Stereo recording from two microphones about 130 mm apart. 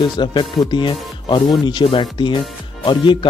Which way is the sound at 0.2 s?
35° left (ahead or behind).